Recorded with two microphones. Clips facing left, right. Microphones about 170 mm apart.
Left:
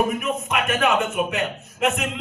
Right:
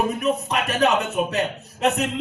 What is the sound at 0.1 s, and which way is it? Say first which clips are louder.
Speech: right 2 dB; 35° right (ahead or behind).